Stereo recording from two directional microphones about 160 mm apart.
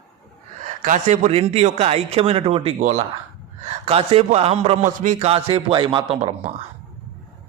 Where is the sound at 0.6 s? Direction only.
55° right (ahead or behind); by 6.3 s 30° right (ahead or behind).